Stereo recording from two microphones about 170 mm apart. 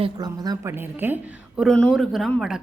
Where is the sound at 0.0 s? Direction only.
25° right (ahead or behind).